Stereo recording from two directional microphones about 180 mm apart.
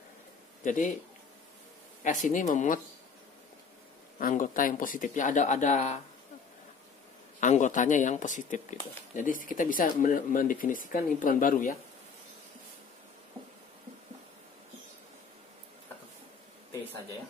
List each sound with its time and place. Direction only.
0.7 s speech: 45° left (ahead or behind)
2.0 s speech: 45° left (ahead or behind)
4.2 s speech: 50° left (ahead or behind)
7.3 s speech: 45° left (ahead or behind)